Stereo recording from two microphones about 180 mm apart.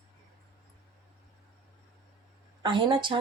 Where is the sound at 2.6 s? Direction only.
25° right (ahead or behind).